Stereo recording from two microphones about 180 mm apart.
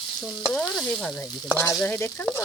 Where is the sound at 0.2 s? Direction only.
Centre (ahead or behind).